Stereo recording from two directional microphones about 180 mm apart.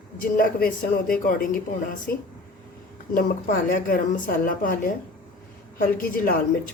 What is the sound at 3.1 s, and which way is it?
Speech, 55° left (ahead or behind).